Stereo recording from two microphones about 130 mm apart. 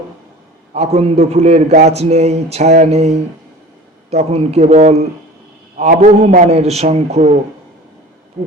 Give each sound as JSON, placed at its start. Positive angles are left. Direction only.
{"t": 0.7, "sound": "a man's voice", "side_deg": -55}
{"t": 5.7, "sound": "a man's voice", "side_deg": -70}